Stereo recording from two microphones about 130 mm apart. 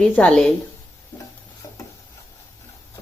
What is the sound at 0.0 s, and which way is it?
Speech, 10° left (ahead or behind).